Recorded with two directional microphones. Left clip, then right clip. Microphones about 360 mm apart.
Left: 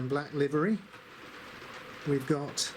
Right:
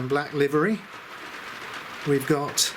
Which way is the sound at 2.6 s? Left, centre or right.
Centre.